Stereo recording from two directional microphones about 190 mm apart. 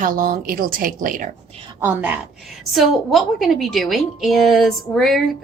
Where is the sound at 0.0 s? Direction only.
45° right (ahead or behind).